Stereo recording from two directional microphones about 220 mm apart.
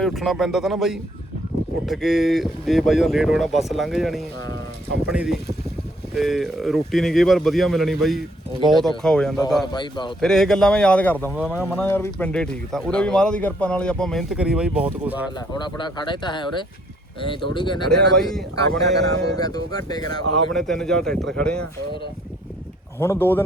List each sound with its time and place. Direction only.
0.0 s speech: centre (ahead or behind)
9.7 s speech: 20° left (ahead or behind)
10.2 s speech: centre (ahead or behind)
11.3 s speech: 5° right (ahead or behind)
11.6 s speech: 10° left (ahead or behind); by 15.2 s 5° right (ahead or behind)
15.4 s speech: 20° left (ahead or behind)
17.9 s speech: centre (ahead or behind)
18.8 s speech: 15° left (ahead or behind)
20.5 s speech: centre (ahead or behind)
23.0 s speech: 10° left (ahead or behind)